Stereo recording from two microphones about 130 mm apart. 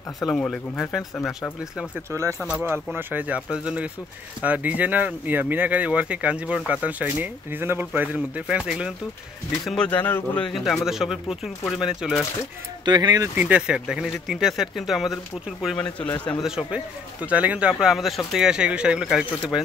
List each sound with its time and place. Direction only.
0.3 s a man's voice: 5° left (ahead or behind)
2.0 s speech: 20° right (ahead or behind)
9.7 s speech: 10° left (ahead or behind)
10.5 s a man's voice: centre (ahead or behind)
12.8 s speech: 35° right (ahead or behind)
13.4 s a man's voice: 10° right (ahead or behind)